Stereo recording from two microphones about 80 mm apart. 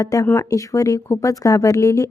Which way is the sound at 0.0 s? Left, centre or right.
Left.